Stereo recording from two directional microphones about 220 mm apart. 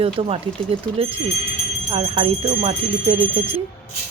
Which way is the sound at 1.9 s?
25° right (ahead or behind).